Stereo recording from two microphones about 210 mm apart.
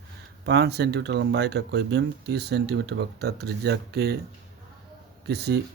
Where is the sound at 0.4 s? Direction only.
50° right (ahead or behind).